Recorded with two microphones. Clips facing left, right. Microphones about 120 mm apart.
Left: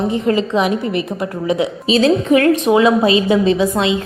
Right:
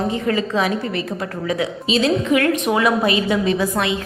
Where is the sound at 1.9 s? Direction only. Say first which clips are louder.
Left 5 dB; 35° left (ahead or behind).